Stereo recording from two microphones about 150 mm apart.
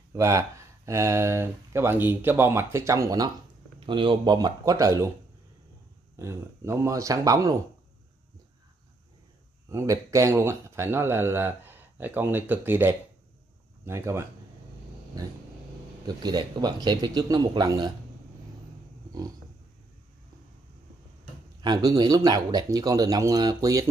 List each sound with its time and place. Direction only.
0.1 s speech: 20° right (ahead or behind)
3.8 s speech: 35° right (ahead or behind)
6.1 s speech: 20° right (ahead or behind)
9.7 s speech: 20° right (ahead or behind)
16.2 s speech: 30° right (ahead or behind)
21.5 s speech: 25° right (ahead or behind)